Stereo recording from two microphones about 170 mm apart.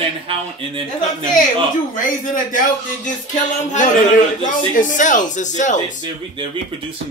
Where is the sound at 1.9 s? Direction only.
50° left (ahead or behind).